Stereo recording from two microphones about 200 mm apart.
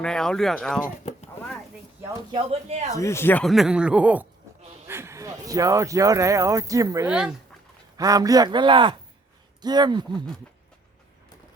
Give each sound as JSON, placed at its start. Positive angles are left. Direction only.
{"t": 0.0, "sound": "speech", "side_deg": 5}
{"t": 2.3, "sound": "speech", "side_deg": -30}
{"t": 2.9, "sound": "speech", "side_deg": 15}
{"t": 4.9, "sound": "a sound", "side_deg": -15}
{"t": 5.5, "sound": "a man's voice", "side_deg": -15}